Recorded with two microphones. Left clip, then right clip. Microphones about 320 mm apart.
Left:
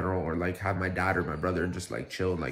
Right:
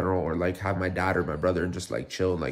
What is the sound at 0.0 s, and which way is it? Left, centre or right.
Speech, centre.